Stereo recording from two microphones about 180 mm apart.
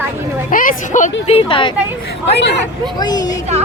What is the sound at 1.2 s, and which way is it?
Speech, 30° left (ahead or behind).